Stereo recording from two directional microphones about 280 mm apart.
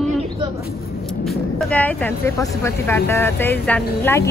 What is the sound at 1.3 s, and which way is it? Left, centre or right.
Speech, centre.